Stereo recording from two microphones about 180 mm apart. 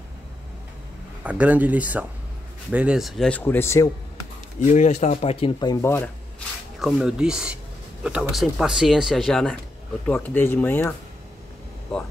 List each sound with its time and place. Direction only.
1.2 s speech: 10° right (ahead or behind); by 3.9 s 15° left (ahead or behind)
4.6 s speech: 45° left (ahead or behind); by 6.0 s 15° left (ahead or behind)
6.8 s speech: 5° right (ahead or behind); by 11.0 s 10° left (ahead or behind)